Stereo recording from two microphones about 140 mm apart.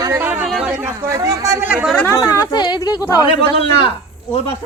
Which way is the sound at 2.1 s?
25° left (ahead or behind).